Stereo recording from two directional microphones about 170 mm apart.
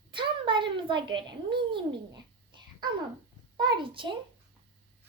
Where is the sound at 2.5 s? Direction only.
25° right (ahead or behind).